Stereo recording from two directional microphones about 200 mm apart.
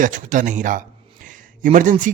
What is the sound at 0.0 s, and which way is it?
A man's voice, 40° right (ahead or behind).